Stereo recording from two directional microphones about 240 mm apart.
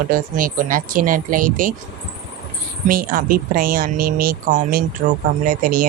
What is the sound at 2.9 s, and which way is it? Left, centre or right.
Speech, right.